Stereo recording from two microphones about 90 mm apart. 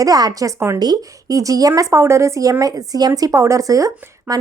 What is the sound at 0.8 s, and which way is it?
A woman's voice, 45° right (ahead or behind).